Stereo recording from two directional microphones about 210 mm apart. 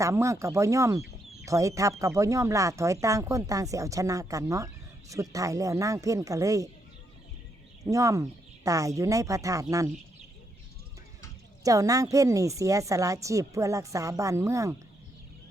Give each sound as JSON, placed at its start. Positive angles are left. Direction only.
{"t": 0.0, "sound": "speech", "side_deg": -15}
{"t": 7.9, "sound": "speech", "side_deg": -15}
{"t": 11.6, "sound": "speech", "side_deg": -15}